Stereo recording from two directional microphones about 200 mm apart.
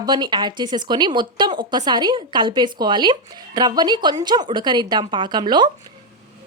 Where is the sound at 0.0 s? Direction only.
20° right (ahead or behind).